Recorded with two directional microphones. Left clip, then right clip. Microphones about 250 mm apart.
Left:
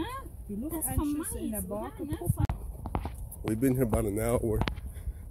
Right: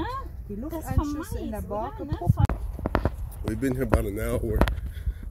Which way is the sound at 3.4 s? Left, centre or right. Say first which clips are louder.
Even; centre.